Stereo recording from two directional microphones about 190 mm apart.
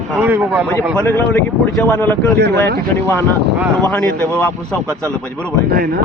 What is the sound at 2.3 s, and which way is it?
Speech, 60° right (ahead or behind).